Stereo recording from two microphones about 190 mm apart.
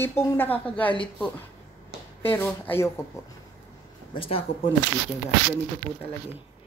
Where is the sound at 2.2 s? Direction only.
10° left (ahead or behind).